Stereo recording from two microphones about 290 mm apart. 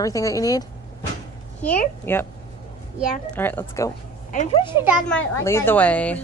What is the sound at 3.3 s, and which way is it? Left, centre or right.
Speech, centre.